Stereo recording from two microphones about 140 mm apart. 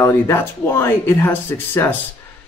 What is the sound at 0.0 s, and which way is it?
Speech, 20° left (ahead or behind).